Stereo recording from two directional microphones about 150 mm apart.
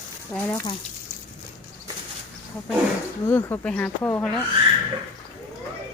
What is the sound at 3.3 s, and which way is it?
Speech, 15° left (ahead or behind).